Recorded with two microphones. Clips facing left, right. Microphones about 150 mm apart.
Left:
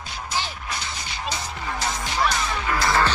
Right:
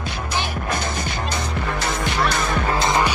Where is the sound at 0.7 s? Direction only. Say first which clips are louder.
Right 8 dB; 50° right (ahead or behind).